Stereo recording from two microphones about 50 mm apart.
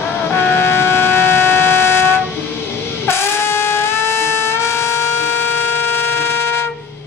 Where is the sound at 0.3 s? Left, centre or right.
Left.